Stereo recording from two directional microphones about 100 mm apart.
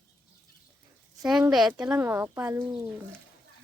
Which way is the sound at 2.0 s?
25° right (ahead or behind).